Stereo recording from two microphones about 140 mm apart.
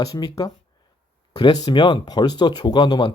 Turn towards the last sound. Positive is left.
turn(degrees=30)  # may be behind; listen again after turning